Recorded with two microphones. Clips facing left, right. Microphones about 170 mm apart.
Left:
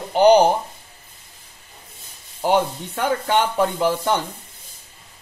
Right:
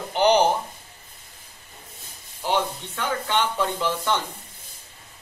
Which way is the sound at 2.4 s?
50° left (ahead or behind).